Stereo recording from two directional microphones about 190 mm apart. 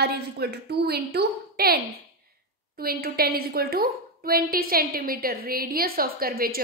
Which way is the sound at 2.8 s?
55° right (ahead or behind).